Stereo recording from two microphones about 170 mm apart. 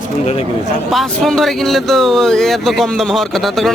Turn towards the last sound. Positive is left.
turn(degrees=0)  # may be behind; listen again after turning